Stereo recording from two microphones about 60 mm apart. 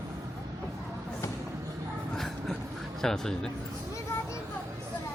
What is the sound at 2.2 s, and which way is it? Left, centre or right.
Vehicle, centre.